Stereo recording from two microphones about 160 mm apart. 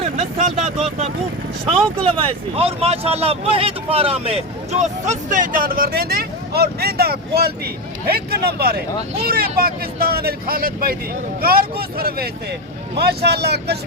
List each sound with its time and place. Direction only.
0.2 s vehicle: 45° right (ahead or behind)
2.2 s speech: 40° right (ahead or behind); by 8.8 s 80° right
9.3 s speech: 70° right (ahead or behind)
13.0 s speech: 90° right